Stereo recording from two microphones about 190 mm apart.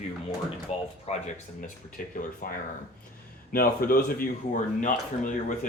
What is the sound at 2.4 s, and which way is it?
Speech, 45° left (ahead or behind).